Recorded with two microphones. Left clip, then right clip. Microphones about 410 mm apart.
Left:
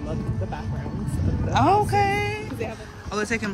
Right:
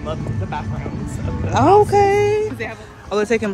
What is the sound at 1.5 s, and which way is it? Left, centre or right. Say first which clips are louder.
Speech: right 7 dB; centre.